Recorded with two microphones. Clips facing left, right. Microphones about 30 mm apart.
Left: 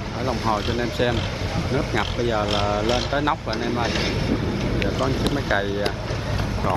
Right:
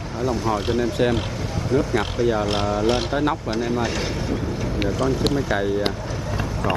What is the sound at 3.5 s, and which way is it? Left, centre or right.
Speech, left.